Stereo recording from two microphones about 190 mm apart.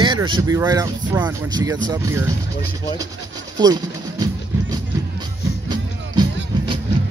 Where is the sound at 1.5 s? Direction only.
20° right (ahead or behind).